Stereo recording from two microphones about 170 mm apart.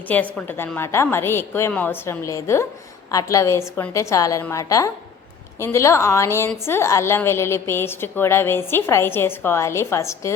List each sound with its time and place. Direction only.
0.1 s a woman's voice: 10° left (ahead or behind)